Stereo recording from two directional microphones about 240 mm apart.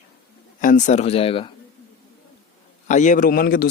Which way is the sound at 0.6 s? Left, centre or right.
Left.